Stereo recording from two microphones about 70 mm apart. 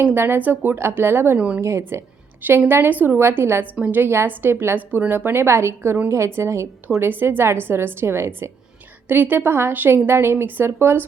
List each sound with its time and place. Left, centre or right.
0.0 s a woman's voice: right
1.4 s a woman's voice: right
1.9 s a woman's voice: right
3.8 s a woman's voice: centre
4.0 s a woman's voice: right
7.1 s a woman's voice: right